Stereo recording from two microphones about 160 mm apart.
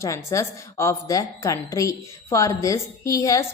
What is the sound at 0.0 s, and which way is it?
A woman's voice, 20° left (ahead or behind).